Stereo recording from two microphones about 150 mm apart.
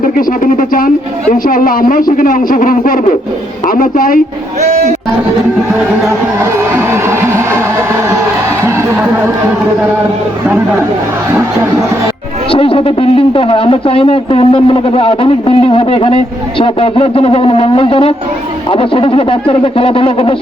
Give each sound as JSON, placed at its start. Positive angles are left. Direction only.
{"t": 0.0, "sound": "speech", "side_deg": 70}
{"t": 6.1, "sound": "speech", "side_deg": -15}
{"t": 12.5, "sound": "speech", "side_deg": 35}